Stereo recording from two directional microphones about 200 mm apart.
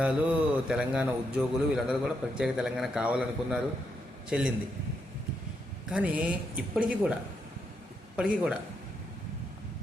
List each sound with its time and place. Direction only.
0.0 s a man's voice: 5° right (ahead or behind)
5.9 s a man's voice: 5° right (ahead or behind)
8.1 s a man's voice: 5° right (ahead or behind)